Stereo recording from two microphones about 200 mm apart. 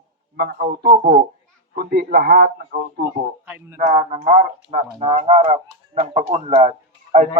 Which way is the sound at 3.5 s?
10° right (ahead or behind).